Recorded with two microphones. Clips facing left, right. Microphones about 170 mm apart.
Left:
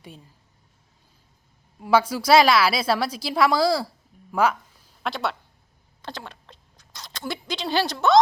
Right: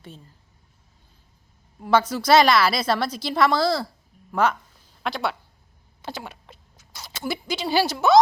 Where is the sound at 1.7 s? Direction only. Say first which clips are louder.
Even; 10° left (ahead or behind).